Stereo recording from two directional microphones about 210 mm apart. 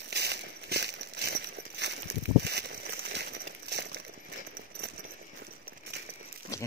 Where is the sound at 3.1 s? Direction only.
55° right (ahead or behind).